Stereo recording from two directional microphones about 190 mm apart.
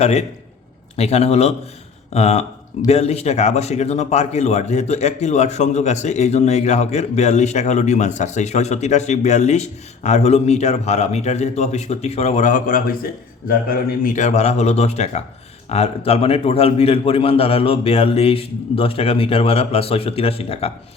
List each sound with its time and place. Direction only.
0.0 s speech: 35° left (ahead or behind)